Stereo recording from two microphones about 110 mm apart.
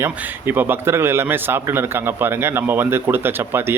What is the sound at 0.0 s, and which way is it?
A man's voice, 20° right (ahead or behind).